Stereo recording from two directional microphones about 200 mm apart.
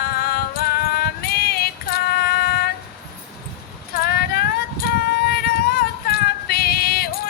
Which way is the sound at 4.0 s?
50° left (ahead or behind).